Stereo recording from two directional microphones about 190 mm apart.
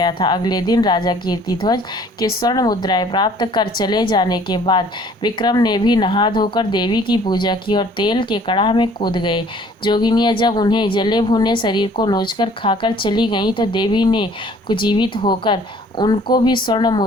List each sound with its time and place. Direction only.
0.0 s a woman's voice: 25° left (ahead or behind)